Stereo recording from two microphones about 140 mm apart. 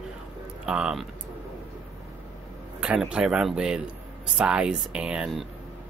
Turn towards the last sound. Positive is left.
turn(degrees=-5)  # may be behind; listen again after turning